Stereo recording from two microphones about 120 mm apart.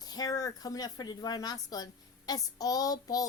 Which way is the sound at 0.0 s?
35° left (ahead or behind).